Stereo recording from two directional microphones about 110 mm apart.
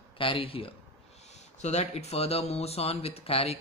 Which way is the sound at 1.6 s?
85° left.